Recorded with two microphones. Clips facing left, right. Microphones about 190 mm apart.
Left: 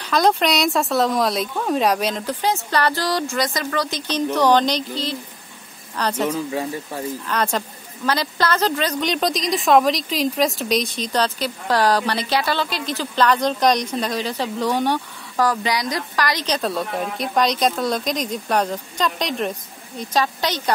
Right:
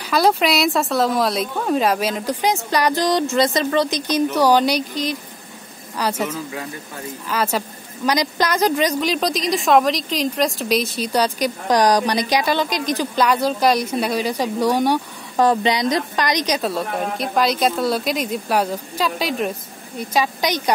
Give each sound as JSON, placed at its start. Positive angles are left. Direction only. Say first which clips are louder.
{"t": 0.0, "sound": "a woman's voice", "louder": "right 1 dB", "side_deg": -5}
{"t": 4.1, "sound": "a woman's voice", "louder": "even", "side_deg": -10}
{"t": 9.0, "sound": "a woman's voice", "louder": "right 1 dB", "side_deg": 0}
{"t": 15.3, "sound": "a woman's voice", "louder": "right 4 dB", "side_deg": -25}